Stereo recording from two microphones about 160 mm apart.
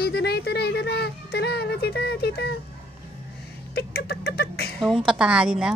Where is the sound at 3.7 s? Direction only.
80° left.